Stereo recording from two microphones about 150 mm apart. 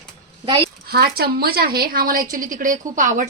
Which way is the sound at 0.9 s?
90° right.